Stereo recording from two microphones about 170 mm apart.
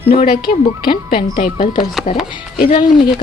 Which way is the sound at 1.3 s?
55° left (ahead or behind).